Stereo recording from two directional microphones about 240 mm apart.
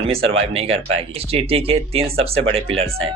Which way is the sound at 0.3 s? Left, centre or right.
Right.